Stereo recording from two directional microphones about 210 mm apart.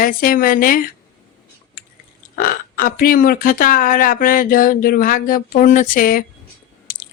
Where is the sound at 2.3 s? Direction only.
40° left (ahead or behind).